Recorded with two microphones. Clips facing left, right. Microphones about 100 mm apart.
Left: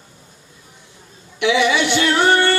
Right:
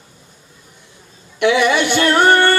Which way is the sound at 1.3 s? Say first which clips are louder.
Right 2 dB; 50° right (ahead or behind).